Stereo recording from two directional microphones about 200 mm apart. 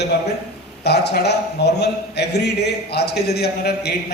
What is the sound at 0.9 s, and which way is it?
A man's voice, 55° left (ahead or behind).